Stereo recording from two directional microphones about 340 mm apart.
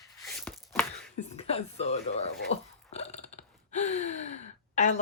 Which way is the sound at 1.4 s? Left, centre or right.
Centre.